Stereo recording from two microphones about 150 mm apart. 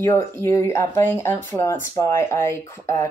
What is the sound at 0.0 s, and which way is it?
Speech, 20° left (ahead or behind).